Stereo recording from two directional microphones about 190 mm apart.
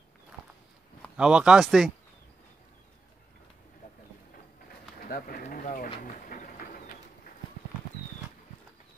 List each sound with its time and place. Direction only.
1.1 s speech: 5° right (ahead or behind)
5.0 s pigeon: 50° left (ahead or behind)
5.9 s bird: 45° left (ahead or behind)